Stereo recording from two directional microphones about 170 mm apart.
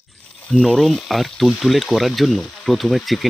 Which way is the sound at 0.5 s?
Centre (ahead or behind).